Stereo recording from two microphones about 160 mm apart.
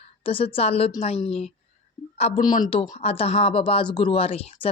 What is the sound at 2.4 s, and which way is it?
Speech, 25° left (ahead or behind).